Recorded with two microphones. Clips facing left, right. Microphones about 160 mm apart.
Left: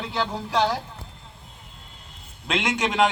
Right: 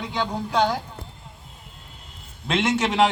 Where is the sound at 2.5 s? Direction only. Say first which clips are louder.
Right 3 dB; 5° right (ahead or behind).